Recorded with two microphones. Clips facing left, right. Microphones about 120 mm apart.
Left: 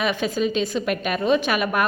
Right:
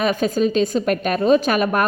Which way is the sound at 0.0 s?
40° right (ahead or behind).